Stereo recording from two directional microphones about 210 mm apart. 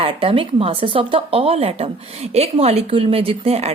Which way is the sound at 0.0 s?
25° right (ahead or behind).